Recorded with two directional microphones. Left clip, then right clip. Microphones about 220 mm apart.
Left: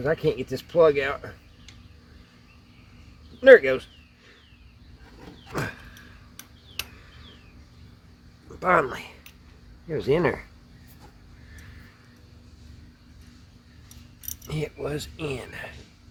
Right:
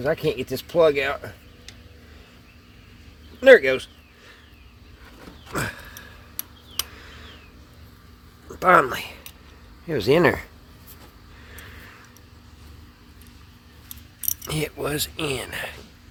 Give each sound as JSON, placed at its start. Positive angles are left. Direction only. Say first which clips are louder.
{"t": 0.0, "sound": "speech", "louder": "right 1 dB", "side_deg": -30}
{"t": 3.4, "sound": "speech", "louder": "right 1 dB", "side_deg": -35}
{"t": 5.5, "sound": "a sound", "louder": "right 3 dB", "side_deg": -45}
{"t": 8.5, "sound": "speech", "louder": "right 5 dB", "side_deg": -45}
{"t": 14.4, "sound": "speech", "louder": "right 4 dB", "side_deg": -55}